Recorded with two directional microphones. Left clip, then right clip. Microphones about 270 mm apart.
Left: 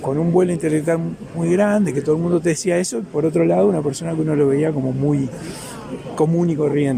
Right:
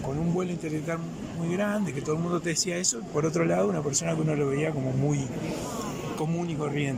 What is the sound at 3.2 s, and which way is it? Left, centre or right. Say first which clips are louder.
A man's voice: left 10 dB; centre.